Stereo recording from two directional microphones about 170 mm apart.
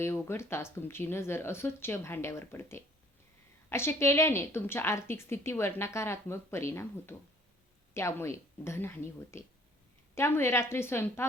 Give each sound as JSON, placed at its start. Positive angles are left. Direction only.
{"t": 0.0, "sound": "a woman's voice", "side_deg": 15}